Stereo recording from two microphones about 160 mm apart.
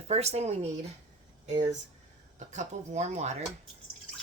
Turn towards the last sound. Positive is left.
turn(degrees=-45)  # may be behind; listen again after turning